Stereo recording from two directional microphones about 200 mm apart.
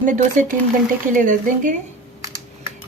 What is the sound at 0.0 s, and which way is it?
A woman's voice, 40° right (ahead or behind).